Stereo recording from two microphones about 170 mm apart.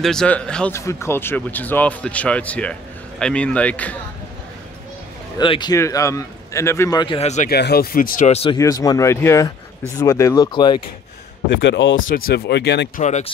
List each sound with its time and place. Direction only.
0.0 s speech: 5° left (ahead or behind)
0.7 s speech: 15° left (ahead or behind)
5.4 s a man's voice: 25° left (ahead or behind)
7.2 s speech: 40° left (ahead or behind)
7.4 s speech: 70° left (ahead or behind)
8.3 s speech: 35° left (ahead or behind)
8.5 s a man's voice: 20° left (ahead or behind)
11.5 s speech: 90° left
12.1 s speech: 60° left (ahead or behind); by 12.9 s 85° left
12.9 s speech: 45° left (ahead or behind)